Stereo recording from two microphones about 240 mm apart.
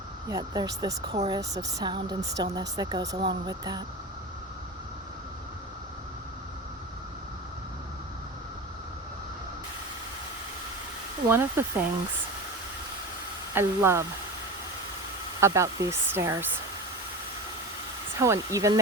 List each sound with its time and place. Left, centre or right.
0.3 s a woman's voice: centre
11.3 s a woman's voice: centre
13.5 s a woman's voice: centre
15.4 s a woman's voice: centre
18.2 s a woman's voice: centre